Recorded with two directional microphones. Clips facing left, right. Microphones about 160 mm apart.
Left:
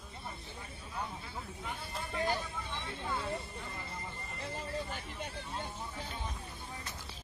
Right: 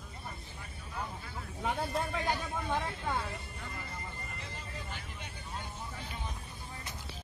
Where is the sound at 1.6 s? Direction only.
75° right (ahead or behind).